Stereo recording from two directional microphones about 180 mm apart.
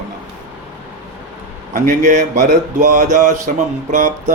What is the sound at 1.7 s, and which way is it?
A man's voice, 45° right (ahead or behind).